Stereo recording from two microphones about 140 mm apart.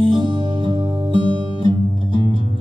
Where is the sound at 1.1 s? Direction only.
40° right (ahead or behind).